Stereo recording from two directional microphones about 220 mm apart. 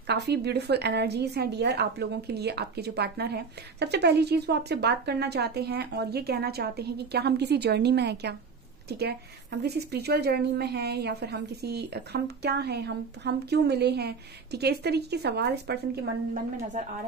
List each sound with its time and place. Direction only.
0.0 s a woman's voice: 50° right (ahead or behind)
9.6 s a woman's voice: 45° right (ahead or behind)